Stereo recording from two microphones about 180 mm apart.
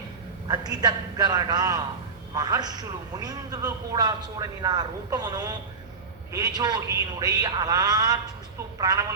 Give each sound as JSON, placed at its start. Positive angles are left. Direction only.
{"t": 0.4, "sound": "a man's voice", "side_deg": -20}